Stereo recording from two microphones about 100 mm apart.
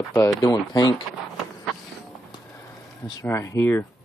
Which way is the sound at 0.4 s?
40° left (ahead or behind).